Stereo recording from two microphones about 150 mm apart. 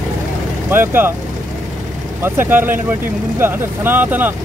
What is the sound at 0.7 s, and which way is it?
Speech, 15° right (ahead or behind).